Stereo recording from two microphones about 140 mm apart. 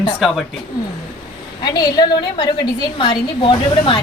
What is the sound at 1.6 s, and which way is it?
A woman's voice, 30° left (ahead or behind).